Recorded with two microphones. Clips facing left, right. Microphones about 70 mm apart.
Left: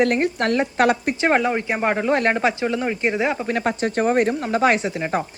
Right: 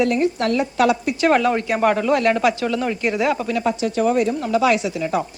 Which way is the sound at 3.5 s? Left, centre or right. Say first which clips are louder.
Right 1 dB; left.